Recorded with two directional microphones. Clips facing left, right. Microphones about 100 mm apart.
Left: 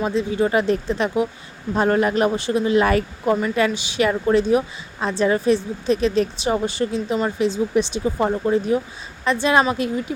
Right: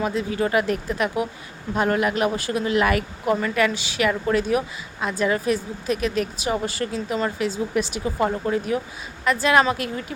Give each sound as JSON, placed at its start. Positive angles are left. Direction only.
{"t": 0.0, "sound": "a woman's voice", "side_deg": 25}